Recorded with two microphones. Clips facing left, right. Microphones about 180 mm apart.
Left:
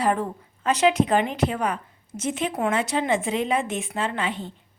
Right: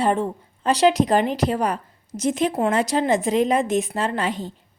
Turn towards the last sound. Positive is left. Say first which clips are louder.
# right 3 dB
turn(degrees=-40)  # may be behind; listen again after turning